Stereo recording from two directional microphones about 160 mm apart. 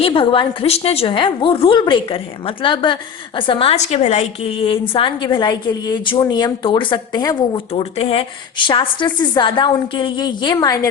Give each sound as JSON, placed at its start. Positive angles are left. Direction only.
{"t": 0.0, "sound": "a woman's voice", "side_deg": 35}
{"t": 7.7, "sound": "a woman's voice", "side_deg": 35}